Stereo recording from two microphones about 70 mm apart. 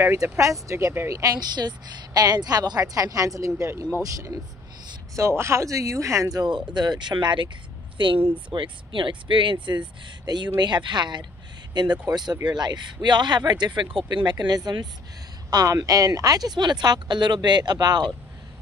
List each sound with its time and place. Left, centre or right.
0.0 s speech: right
5.1 s speech: right
9.7 s a man's voice: right
15.5 s speech: right